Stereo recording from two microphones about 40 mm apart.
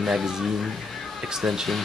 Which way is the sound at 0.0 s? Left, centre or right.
Centre.